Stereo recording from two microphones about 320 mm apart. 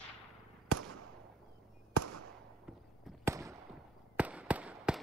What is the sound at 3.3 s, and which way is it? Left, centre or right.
Fireworks, centre.